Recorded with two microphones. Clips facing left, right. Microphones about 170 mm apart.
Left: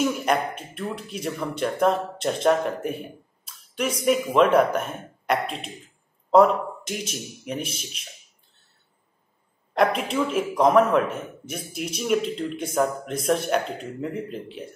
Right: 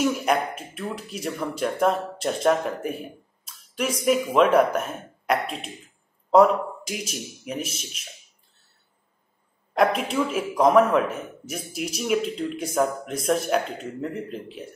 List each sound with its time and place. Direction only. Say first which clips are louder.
0.0 s speech: even; 5° right (ahead or behind)
10.1 s a man's voice: left 1 dB; 10° right (ahead or behind)